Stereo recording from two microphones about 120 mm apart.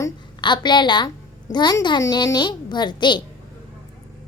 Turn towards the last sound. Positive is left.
turn(degrees=40)  # may be behind; listen again after turning